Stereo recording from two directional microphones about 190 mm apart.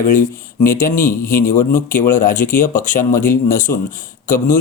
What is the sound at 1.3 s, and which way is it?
Speech, 45° left (ahead or behind).